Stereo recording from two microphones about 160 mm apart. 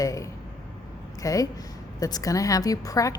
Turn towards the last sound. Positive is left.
turn(degrees=20)  # may be behind; listen again after turning